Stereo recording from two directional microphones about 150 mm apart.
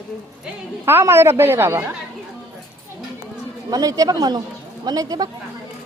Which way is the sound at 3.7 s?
25° right (ahead or behind).